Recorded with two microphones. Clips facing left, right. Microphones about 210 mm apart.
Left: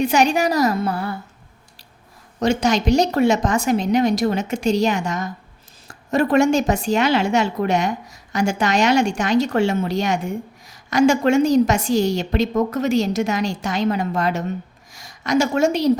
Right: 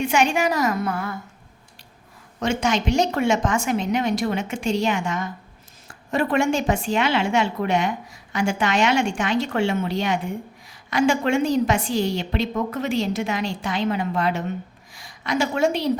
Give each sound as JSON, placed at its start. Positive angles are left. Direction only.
{"t": 0.0, "sound": "speech", "side_deg": 40}
{"t": 2.4, "sound": "a woman's voice", "side_deg": 40}